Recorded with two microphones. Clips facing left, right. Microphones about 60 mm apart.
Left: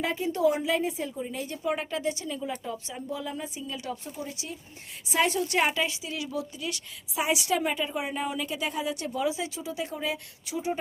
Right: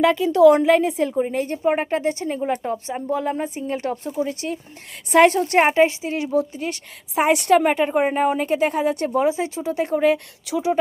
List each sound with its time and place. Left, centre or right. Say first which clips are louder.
0.0 s a woman's voice: right 12 dB; right
0.6 s a woman's voice: right 11 dB; right
7.2 s a woman's voice: right 10 dB; right
10.5 s a woman's voice: right 9 dB; right